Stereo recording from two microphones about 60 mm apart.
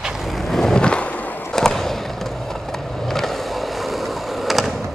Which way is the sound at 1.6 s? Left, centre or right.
Centre.